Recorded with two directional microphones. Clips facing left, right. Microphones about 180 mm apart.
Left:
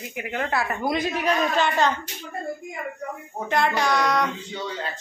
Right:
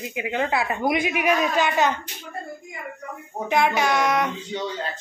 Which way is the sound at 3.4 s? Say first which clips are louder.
Right 2 dB; 10° right (ahead or behind).